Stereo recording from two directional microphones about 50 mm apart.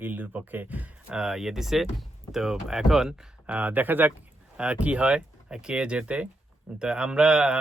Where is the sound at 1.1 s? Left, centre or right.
Centre.